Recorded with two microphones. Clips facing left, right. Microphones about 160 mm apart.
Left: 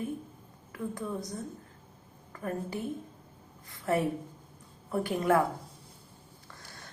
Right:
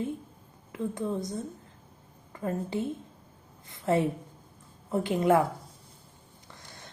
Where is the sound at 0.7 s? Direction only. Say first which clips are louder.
Right 4 dB; 20° right (ahead or behind).